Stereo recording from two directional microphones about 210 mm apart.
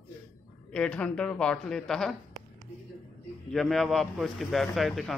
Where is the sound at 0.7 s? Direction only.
5° left (ahead or behind).